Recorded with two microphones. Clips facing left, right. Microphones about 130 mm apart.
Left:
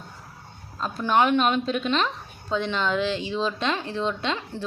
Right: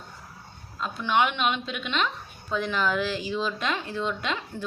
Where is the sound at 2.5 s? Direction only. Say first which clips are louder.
Left 1 dB; 25° left (ahead or behind).